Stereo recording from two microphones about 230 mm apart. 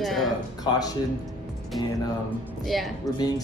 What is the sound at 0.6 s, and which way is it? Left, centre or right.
Speech, centre.